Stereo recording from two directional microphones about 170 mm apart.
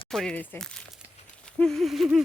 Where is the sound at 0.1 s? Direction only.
5° left (ahead or behind).